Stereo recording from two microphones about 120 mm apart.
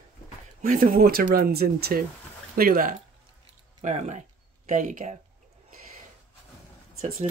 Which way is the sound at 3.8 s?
75° right (ahead or behind).